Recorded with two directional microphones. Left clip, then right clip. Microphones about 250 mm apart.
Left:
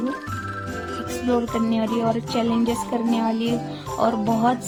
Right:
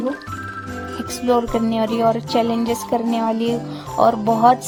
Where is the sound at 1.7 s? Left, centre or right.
Right.